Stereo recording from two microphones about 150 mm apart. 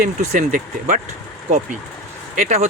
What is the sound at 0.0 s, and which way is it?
Speech, 60° right (ahead or behind).